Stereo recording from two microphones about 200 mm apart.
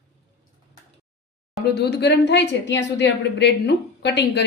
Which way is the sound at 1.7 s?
55° left (ahead or behind).